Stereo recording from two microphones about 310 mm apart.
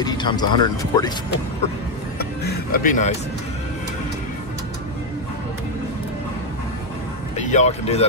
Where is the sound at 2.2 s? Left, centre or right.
Left.